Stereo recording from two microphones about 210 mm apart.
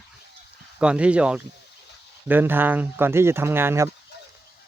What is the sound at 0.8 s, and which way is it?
Speech, 5° right (ahead or behind).